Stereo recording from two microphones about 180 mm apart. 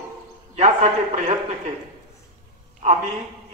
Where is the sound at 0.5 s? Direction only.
40° right (ahead or behind).